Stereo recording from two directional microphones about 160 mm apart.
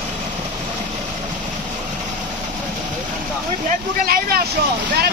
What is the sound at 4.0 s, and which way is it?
Speech, 70° right (ahead or behind).